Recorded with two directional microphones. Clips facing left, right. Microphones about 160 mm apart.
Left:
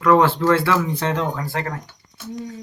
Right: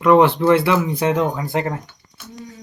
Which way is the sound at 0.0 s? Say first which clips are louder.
Right 3 dB; 15° right (ahead or behind).